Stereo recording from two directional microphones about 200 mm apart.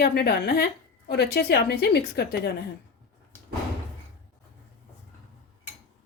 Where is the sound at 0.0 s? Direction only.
50° left (ahead or behind).